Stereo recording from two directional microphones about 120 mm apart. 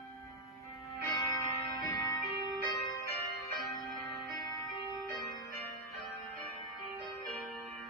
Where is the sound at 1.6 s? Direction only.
40° left (ahead or behind).